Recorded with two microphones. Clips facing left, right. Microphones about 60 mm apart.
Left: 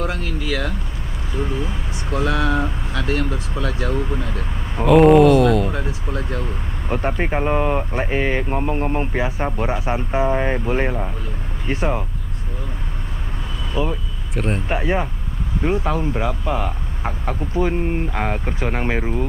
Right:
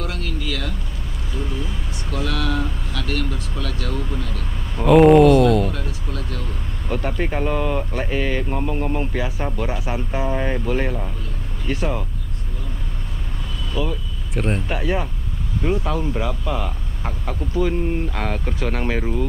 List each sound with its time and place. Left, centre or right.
0.0 s vehicle: left
1.3 s speech: left
4.8 s speech: centre
5.7 s speech: left
13.8 s speech: left
14.3 s speech: centre
14.7 s speech: left